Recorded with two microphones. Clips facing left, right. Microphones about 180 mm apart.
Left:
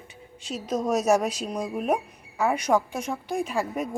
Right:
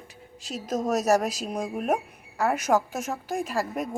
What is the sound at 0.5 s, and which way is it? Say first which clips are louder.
Speech: left 1 dB; 40° right (ahead or behind).